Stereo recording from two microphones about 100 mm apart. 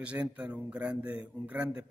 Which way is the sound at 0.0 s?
15° right (ahead or behind).